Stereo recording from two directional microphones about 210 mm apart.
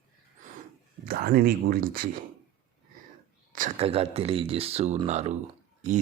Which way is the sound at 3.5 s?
35° right (ahead or behind).